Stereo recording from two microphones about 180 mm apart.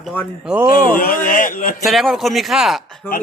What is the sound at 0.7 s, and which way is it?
Speech, 50° left (ahead or behind).